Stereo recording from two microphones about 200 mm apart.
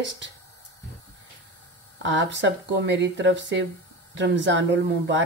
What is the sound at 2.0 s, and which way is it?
Speech, 65° right (ahead or behind).